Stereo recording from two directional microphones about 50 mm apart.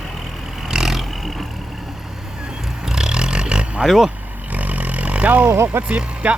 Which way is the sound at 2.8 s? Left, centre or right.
Centre.